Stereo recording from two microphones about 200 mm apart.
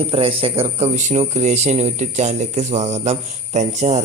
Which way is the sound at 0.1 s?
30° right (ahead or behind).